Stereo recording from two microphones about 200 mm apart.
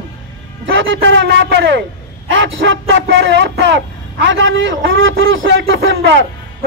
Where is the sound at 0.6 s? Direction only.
70° right (ahead or behind).